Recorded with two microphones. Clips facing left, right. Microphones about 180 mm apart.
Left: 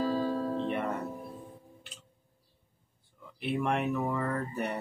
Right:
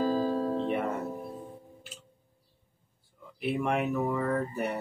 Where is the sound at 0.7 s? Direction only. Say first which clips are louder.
Right 2 dB; centre (ahead or behind).